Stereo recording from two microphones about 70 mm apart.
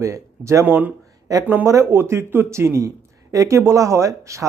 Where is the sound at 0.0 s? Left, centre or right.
Right.